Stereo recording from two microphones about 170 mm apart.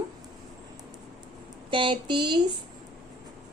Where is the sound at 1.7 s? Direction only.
30° right (ahead or behind).